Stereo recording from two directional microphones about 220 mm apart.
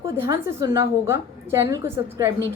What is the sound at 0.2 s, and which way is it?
A woman's voice, 15° right (ahead or behind).